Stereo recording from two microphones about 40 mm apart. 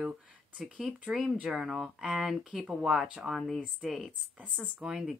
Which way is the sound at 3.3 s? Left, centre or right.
Centre.